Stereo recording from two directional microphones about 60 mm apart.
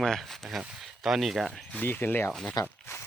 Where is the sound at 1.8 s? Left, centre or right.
Left.